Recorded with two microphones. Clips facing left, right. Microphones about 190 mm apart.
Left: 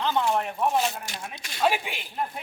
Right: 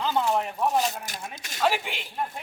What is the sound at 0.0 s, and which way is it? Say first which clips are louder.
Speech: even; 5° right (ahead or behind).